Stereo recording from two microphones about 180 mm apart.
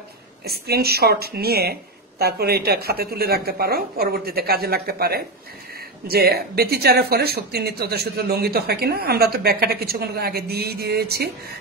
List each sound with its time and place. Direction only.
0.5 s speech: 60° right (ahead or behind)